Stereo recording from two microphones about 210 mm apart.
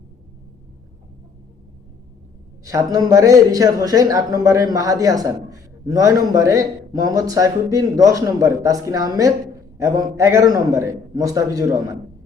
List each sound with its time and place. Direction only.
2.6 s speech: 15° right (ahead or behind)